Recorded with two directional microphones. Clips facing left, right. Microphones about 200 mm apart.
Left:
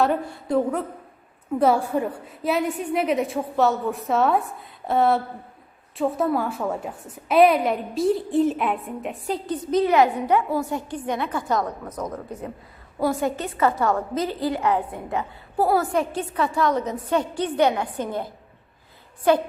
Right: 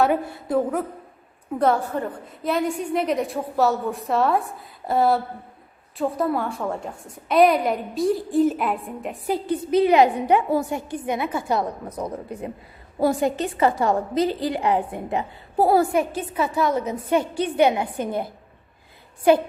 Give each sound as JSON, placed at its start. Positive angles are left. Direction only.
{"t": 0.0, "sound": "a woman's voice", "side_deg": 0}
{"t": 15.9, "sound": "a woman's voice", "side_deg": -5}